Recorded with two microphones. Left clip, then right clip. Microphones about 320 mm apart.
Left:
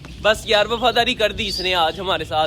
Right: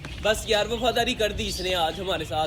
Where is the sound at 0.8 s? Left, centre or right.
Centre.